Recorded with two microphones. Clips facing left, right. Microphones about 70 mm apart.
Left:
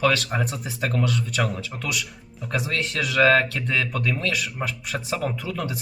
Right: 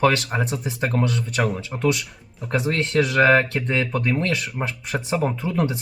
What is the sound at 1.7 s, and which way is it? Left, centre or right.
Speech, right.